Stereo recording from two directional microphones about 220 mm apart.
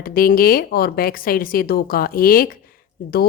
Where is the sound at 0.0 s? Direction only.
40° left (ahead or behind).